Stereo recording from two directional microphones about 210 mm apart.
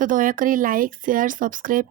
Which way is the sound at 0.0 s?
40° right (ahead or behind).